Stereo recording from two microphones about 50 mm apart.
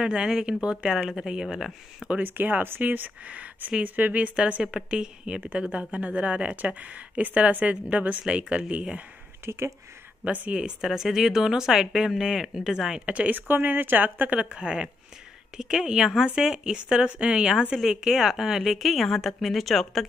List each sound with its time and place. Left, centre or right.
0.0 s speech: centre
2.2 s speech: right
3.3 s speech: right
9.4 s speech: right
10.2 s speech: right
10.5 s speech: centre
10.9 s speech: centre
13.0 s speech: right
13.5 s a woman's voice: right; by 20.1 s centre